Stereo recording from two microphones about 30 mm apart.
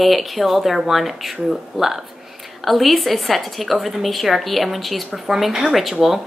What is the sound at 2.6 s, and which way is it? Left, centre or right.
Speech, centre.